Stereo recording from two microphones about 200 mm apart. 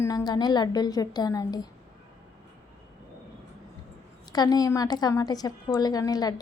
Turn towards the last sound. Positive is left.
turn(degrees=20)  # may be behind; listen again after turning